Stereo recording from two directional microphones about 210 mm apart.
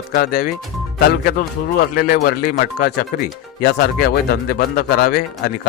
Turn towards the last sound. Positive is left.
turn(degrees=45)  # may be behind; listen again after turning